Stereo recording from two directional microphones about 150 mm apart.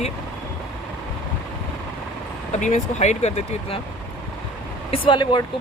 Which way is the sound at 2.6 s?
55° left (ahead or behind).